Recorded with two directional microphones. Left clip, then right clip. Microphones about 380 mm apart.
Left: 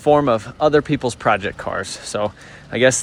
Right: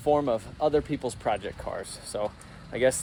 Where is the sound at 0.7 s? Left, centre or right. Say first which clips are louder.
Left 10 dB; left.